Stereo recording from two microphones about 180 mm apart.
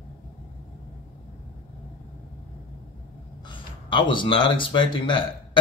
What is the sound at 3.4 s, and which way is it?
Speech, 25° left (ahead or behind).